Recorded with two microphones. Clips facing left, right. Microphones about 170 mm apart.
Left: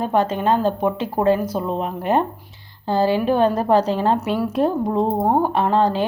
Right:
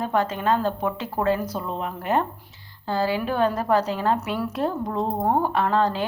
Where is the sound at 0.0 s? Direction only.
20° left (ahead or behind).